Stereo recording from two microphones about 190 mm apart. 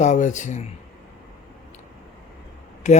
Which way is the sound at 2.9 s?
40° left (ahead or behind).